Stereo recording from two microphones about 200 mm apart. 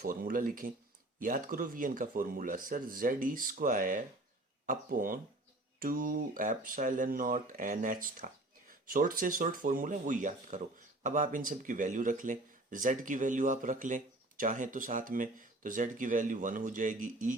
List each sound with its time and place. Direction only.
0.0 s speech: 45° right (ahead or behind)